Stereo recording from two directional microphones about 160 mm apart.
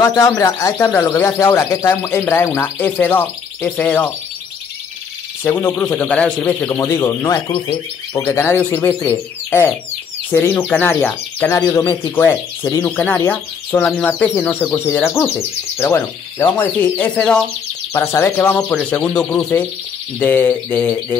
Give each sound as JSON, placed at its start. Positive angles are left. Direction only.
{"t": 0.0, "sound": "speech", "side_deg": 20}
{"t": 5.4, "sound": "speech", "side_deg": 20}
{"t": 5.9, "sound": "speech", "side_deg": 5}
{"t": 7.4, "sound": "speech", "side_deg": 35}
{"t": 8.1, "sound": "speech", "side_deg": 10}
{"t": 18.7, "sound": "speech", "side_deg": 5}